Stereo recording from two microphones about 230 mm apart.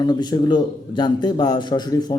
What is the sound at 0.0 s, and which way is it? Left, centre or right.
A man's voice, centre.